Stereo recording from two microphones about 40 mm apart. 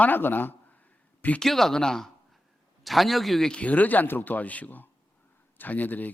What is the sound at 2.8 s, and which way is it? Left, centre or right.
Speech, centre.